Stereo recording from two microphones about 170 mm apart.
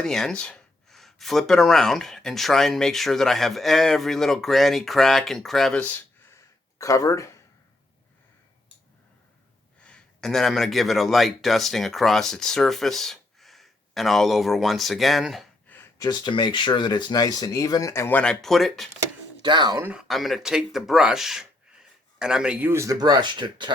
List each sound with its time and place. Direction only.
0.0 s speech: 5° left (ahead or behind); by 7.3 s 20° left (ahead or behind)
9.8 s speech: 5° left (ahead or behind)
15.7 s a sound: 15° left (ahead or behind)
16.0 s speech: 25° left (ahead or behind); by 18.9 s centre (ahead or behind)
19.4 s speech: 25° right (ahead or behind)
19.8 s speech: 5° right (ahead or behind); by 23.7 s 25° right (ahead or behind)